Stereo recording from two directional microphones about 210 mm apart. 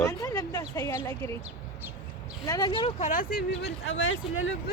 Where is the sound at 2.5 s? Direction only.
20° left (ahead or behind).